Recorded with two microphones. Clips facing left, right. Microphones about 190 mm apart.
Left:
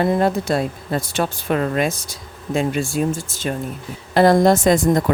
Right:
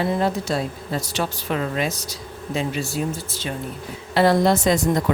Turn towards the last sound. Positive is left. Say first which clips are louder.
# left 4 dB
turn(degrees=50)  # may be behind; listen again after turning